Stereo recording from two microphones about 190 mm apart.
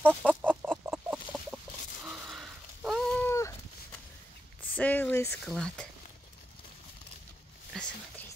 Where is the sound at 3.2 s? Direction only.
15° left (ahead or behind).